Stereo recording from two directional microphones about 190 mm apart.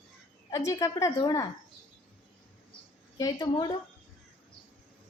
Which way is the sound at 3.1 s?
20° left (ahead or behind).